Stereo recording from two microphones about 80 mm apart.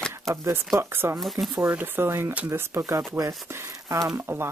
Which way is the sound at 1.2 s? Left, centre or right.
Centre.